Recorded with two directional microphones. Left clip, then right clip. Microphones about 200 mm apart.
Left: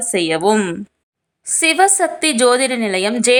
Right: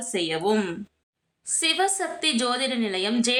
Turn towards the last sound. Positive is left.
turn(degrees=40)  # may be behind; listen again after turning